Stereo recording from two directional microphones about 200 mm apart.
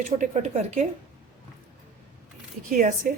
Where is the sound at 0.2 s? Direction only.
35° right (ahead or behind).